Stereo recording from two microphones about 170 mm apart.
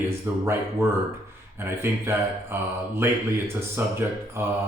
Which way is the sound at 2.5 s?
15° right (ahead or behind).